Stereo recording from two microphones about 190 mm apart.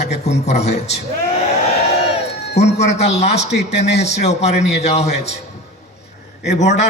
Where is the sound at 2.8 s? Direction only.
35° left (ahead or behind).